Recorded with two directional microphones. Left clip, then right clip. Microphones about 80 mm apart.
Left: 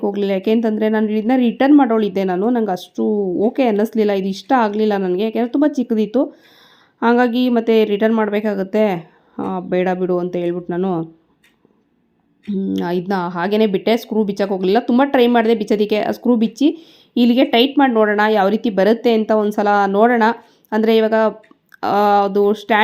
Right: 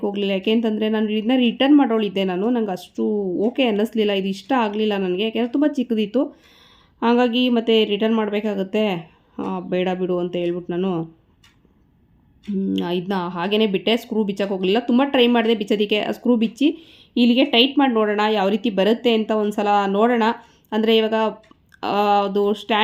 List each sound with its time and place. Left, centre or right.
0.0 s speech: left
9.3 s speech: centre
9.6 s speech: left
12.7 s speech: left